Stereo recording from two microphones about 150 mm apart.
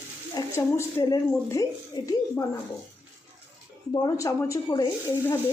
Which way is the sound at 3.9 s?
25° left (ahead or behind).